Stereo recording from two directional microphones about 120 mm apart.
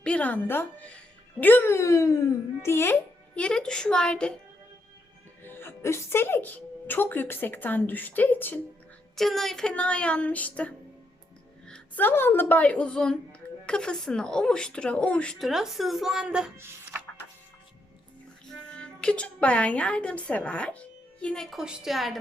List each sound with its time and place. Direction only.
0.0 s a child's voice: 10° left (ahead or behind)
5.4 s a woman's voice: 20° left (ahead or behind)
9.1 s a child's voice: centre (ahead or behind)
18.7 s a woman's voice: 10° left (ahead or behind)